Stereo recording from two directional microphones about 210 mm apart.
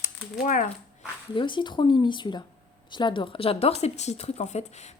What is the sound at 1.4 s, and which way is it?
Speech, 20° left (ahead or behind).